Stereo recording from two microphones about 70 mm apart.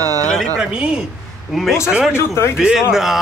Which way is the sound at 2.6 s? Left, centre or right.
Centre.